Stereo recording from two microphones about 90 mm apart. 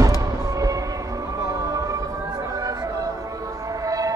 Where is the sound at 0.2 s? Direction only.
40° right (ahead or behind).